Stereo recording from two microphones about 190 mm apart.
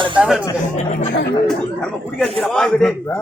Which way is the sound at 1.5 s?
5° left (ahead or behind).